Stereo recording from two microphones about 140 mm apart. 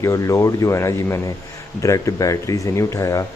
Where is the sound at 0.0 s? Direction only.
20° left (ahead or behind).